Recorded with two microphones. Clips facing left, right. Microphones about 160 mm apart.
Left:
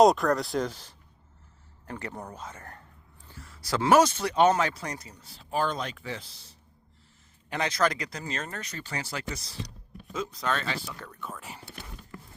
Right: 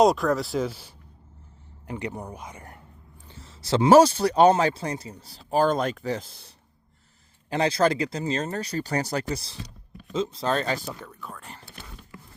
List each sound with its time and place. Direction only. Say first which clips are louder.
0.0 s speech: even; centre (ahead or behind)
3.2 s speech: right 6 dB; 25° right (ahead or behind); by 6.6 s 55° right (ahead or behind)
7.5 s speech: right 5 dB; 30° right (ahead or behind)
10.1 s speech: right 5 dB; 25° right (ahead or behind); by 10.9 s 40° right (ahead or behind)
11.0 s speech: even; 5° right (ahead or behind)